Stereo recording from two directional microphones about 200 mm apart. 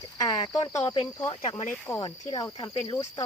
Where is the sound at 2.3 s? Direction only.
20° left (ahead or behind).